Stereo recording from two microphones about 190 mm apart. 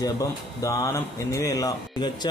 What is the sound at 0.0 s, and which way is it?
Speech, 20° left (ahead or behind).